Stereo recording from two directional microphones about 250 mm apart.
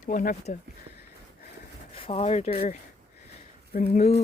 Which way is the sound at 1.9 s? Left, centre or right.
Left.